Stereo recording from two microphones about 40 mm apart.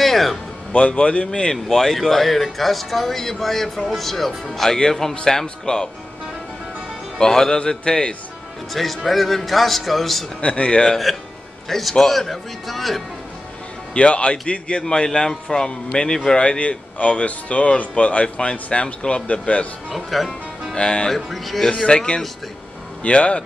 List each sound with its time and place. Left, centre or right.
0.0 s speech: centre
0.7 s speech: left; by 4.7 s centre
4.7 s speech: centre
7.2 s speech: centre
8.7 s speech: centre
10.4 s a man's voice: left
10.9 s speech: centre
13.9 s a man's voice: left
19.9 s speech: centre
20.7 s a man's voice: left
21.1 s speech: centre
21.8 s a man's voice: left